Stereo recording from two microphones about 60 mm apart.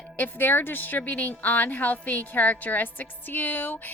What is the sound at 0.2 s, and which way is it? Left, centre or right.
A woman's voice, left.